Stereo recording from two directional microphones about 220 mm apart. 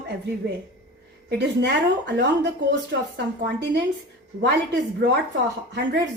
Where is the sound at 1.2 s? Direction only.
50° right (ahead or behind).